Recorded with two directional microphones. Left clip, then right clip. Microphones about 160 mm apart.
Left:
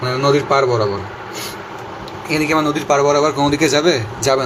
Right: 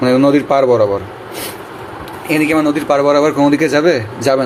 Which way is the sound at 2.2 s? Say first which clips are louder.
Right 3 dB; 40° right (ahead or behind).